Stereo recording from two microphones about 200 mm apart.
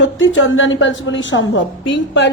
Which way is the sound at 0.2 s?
75° left (ahead or behind).